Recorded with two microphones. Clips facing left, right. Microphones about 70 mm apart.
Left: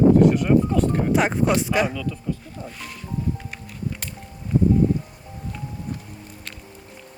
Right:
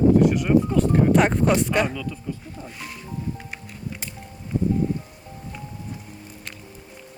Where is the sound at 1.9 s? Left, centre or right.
Centre.